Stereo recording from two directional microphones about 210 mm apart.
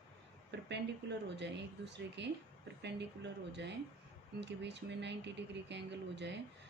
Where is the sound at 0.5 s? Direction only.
55° right (ahead or behind).